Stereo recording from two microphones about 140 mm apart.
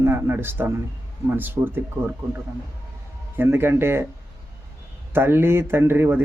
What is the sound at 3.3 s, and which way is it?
Speech, 15° right (ahead or behind).